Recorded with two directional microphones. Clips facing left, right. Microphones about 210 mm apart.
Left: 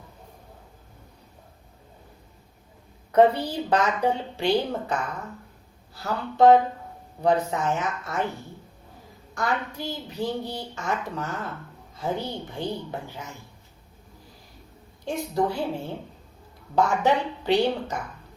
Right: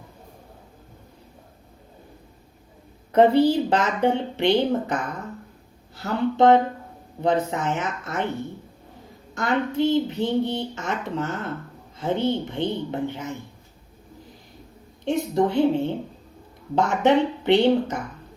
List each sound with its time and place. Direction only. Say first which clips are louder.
3.1 s a woman's voice: right 3 dB; 25° right (ahead or behind)
6.0 s a woman's voice: right 1 dB; 20° right (ahead or behind)
9.3 s a woman's voice: right 5 dB; 20° right (ahead or behind)
15.0 s a woman's voice: right 4 dB; 20° right (ahead or behind)